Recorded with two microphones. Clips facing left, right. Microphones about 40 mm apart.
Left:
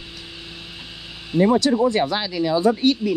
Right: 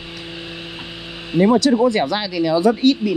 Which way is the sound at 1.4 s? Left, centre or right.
Right.